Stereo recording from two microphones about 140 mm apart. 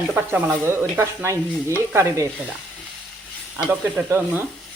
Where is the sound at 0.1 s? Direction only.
10° right (ahead or behind).